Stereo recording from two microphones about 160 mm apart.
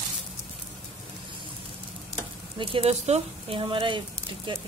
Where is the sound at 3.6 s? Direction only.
30° right (ahead or behind).